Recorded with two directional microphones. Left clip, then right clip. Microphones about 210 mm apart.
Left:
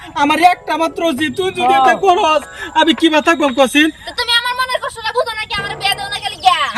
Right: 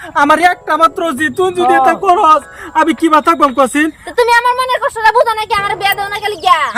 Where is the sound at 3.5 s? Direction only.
5° right (ahead or behind).